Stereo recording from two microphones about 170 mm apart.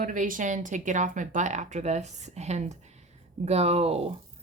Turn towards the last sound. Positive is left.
turn(degrees=-35)  # may be behind; listen again after turning